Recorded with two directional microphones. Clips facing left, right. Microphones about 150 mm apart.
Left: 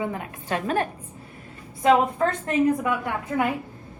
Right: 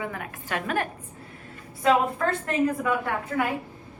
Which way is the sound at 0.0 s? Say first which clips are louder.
Left 4 dB; 25° left (ahead or behind).